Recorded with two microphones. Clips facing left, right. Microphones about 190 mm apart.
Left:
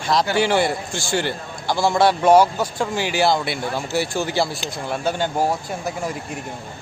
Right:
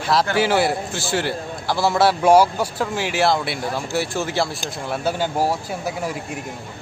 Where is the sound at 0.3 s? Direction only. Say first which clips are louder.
Even; 5° right (ahead or behind).